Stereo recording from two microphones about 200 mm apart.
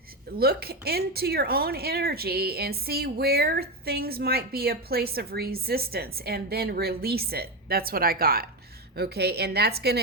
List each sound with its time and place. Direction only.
0.3 s speech: 50° right (ahead or behind)